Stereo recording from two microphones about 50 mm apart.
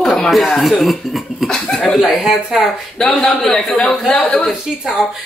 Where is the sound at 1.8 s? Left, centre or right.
Centre.